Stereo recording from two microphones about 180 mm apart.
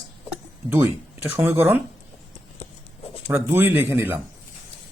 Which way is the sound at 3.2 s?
10° right (ahead or behind).